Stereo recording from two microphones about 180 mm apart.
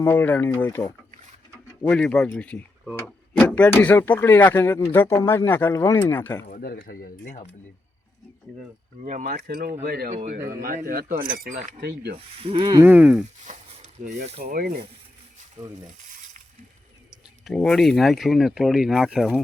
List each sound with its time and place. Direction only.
0.0 s speech: 10° left (ahead or behind)
1.9 s speech: 5° left (ahead or behind)
6.5 s speech: 55° left (ahead or behind)
9.0 s speech: 40° right (ahead or behind)
9.3 s speech: 60° right (ahead or behind)
12.1 s speech: 30° right (ahead or behind)
12.8 s speech: 10° right (ahead or behind)
13.4 s speech: 45° right (ahead or behind)
14.4 s speech: 55° right (ahead or behind)
17.1 s speech: centre (ahead or behind)